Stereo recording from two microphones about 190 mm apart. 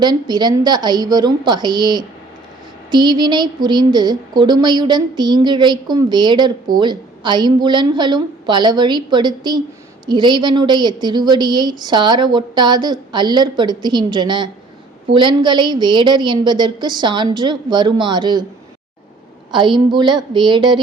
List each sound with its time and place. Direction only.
0.0 s a woman's voice: 20° right (ahead or behind)
19.5 s a woman's voice: 25° right (ahead or behind)